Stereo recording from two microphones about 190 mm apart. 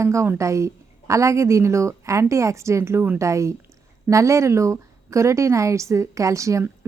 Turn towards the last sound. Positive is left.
turn(degrees=-15)  # may be behind; listen again after turning